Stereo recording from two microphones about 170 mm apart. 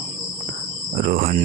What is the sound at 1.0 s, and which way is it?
Speech, 55° right (ahead or behind).